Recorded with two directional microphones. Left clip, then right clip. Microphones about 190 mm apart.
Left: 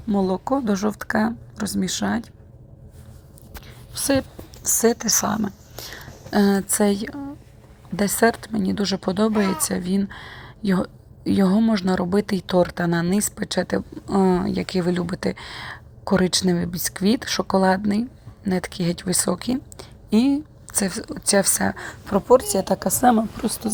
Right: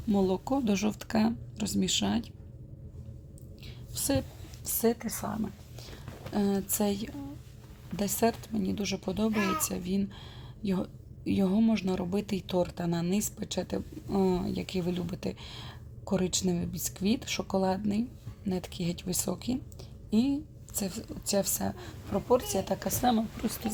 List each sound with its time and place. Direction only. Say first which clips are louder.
0.1 s speech: left 7 dB; 15° left (ahead or behind)
3.9 s speech: left 9 dB; 20° left (ahead or behind)
4.6 s a woman's voice: left 10 dB; 35° left (ahead or behind)
22.3 s a woman's voice: left 10 dB; 50° left (ahead or behind); by 23.5 s 35° left (ahead or behind)